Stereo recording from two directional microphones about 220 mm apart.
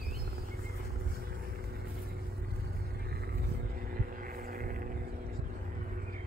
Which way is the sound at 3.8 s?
40° right (ahead or behind).